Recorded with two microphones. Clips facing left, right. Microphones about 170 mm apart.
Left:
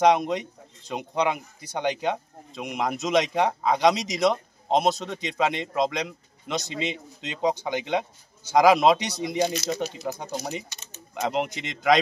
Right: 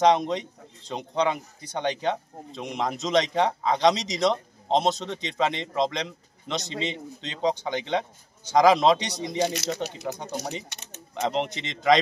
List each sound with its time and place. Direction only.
0.0 s a man's voice: 5° left (ahead or behind)
10.7 s typewriter: 70° right (ahead or behind)
11.2 s speech: 5° left (ahead or behind)